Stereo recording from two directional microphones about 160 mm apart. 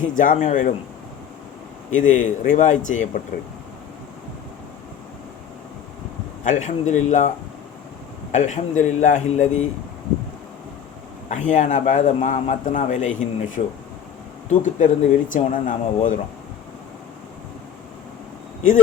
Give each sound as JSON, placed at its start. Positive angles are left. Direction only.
{"t": 0.1, "sound": "speech", "side_deg": 55}
{"t": 1.9, "sound": "a man's voice", "side_deg": 55}
{"t": 6.4, "sound": "a man's voice", "side_deg": 50}
{"t": 8.3, "sound": "a man's voice", "side_deg": 50}
{"t": 11.3, "sound": "a man's voice", "side_deg": 50}